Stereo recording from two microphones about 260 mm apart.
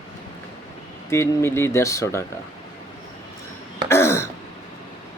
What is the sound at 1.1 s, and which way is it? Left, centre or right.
Speech, centre.